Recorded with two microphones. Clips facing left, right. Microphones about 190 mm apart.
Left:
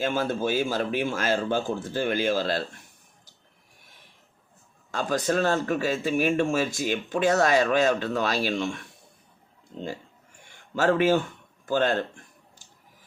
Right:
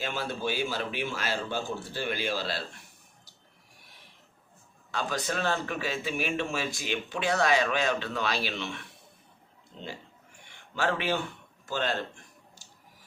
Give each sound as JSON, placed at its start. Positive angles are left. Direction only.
{"t": 0.0, "sound": "a man's voice", "side_deg": 45}
{"t": 4.9, "sound": "a man's voice", "side_deg": 45}
{"t": 10.5, "sound": "a man's voice", "side_deg": 45}